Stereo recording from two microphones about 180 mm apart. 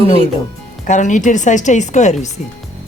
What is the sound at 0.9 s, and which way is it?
Speech, 45° left (ahead or behind).